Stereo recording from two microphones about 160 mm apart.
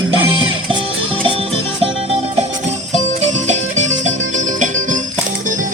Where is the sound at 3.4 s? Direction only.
50° right (ahead or behind).